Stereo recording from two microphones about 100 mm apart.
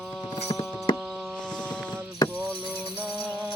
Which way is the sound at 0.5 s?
50° left (ahead or behind).